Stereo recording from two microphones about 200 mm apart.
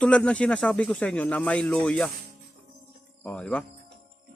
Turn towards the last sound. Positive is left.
turn(degrees=5)  # may be behind; listen again after turning